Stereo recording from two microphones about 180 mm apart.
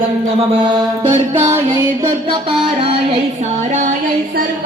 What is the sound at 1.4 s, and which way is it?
Speech, 20° right (ahead or behind).